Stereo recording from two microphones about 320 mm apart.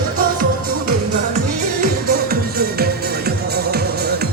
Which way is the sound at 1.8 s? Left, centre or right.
Right.